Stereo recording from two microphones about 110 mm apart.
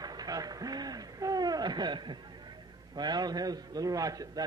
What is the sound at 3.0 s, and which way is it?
A man's voice, 40° right (ahead or behind).